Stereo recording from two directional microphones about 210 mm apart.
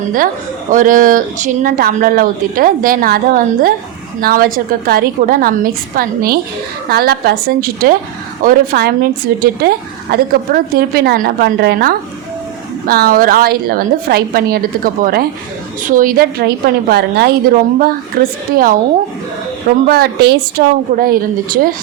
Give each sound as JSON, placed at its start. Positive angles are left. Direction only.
{"t": 0.7, "sound": "a woman's voice", "side_deg": -40}
{"t": 19.9, "sound": "a woman's voice", "side_deg": -50}